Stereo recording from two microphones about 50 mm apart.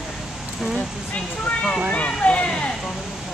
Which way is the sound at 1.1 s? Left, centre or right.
Centre.